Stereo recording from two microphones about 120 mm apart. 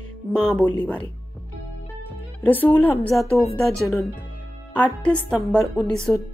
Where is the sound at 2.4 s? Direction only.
15° left (ahead or behind).